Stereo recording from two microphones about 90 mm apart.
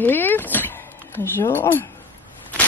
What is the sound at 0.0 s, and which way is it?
Speech, 25° left (ahead or behind).